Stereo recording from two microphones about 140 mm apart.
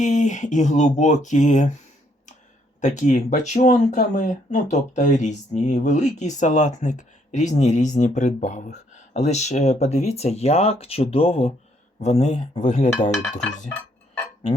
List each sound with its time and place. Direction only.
0.0 s speech: 60° left (ahead or behind)
2.8 s speech: 60° left (ahead or behind)